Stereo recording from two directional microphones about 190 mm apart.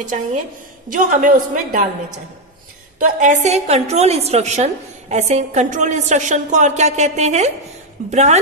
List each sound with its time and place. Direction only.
0.9 s a woman's voice: 50° right (ahead or behind)
3.0 s a woman's voice: 40° right (ahead or behind)